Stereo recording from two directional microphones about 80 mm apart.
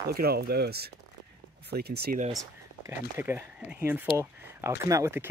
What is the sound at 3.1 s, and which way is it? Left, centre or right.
Speech, right.